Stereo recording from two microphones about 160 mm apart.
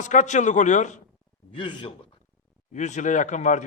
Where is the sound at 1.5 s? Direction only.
30° left (ahead or behind).